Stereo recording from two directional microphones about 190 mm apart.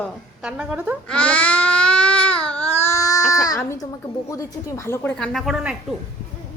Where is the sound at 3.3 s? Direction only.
20° left (ahead or behind).